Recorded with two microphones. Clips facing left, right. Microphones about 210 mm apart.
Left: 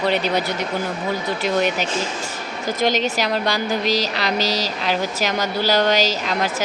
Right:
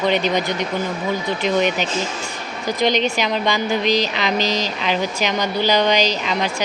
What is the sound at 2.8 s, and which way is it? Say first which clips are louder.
Speech: right 1 dB; 45° left (ahead or behind).